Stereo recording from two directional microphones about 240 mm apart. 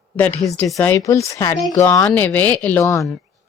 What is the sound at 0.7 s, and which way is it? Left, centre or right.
Speech, centre.